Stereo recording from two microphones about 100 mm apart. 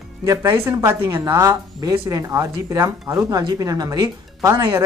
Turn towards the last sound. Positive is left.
turn(degrees=-30)  # may be behind; listen again after turning